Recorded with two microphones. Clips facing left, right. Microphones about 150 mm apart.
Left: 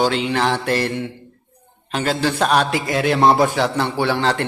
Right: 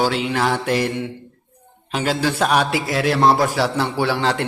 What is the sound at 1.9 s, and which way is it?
A man's voice, 10° right (ahead or behind).